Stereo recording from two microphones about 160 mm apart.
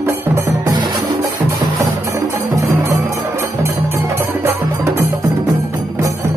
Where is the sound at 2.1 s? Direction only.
15° right (ahead or behind).